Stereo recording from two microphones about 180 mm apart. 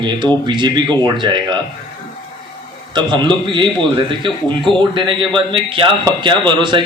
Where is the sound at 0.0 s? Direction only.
25° right (ahead or behind).